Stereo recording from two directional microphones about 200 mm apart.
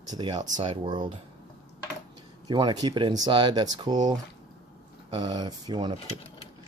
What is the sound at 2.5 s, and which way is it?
Speech, 20° right (ahead or behind).